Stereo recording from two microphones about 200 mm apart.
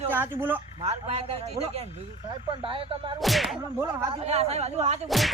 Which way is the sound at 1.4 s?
30° right (ahead or behind).